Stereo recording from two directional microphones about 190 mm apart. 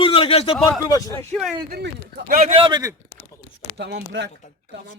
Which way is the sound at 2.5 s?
25° right (ahead or behind).